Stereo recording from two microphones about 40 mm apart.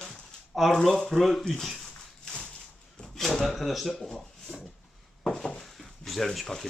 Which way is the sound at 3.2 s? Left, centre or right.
Centre.